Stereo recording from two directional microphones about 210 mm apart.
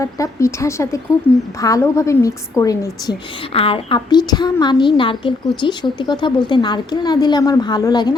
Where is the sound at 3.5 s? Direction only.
25° left (ahead or behind).